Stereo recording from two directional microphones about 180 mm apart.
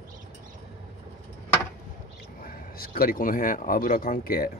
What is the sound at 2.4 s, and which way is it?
Speech, 55° left (ahead or behind).